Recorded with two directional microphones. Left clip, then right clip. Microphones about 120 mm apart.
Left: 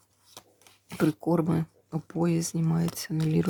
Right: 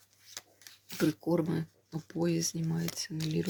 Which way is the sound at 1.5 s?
70° left (ahead or behind).